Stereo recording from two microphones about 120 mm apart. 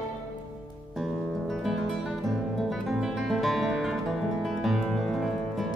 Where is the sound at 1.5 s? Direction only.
Centre (ahead or behind).